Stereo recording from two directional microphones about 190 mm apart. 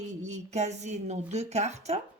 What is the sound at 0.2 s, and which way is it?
Speech, 35° right (ahead or behind).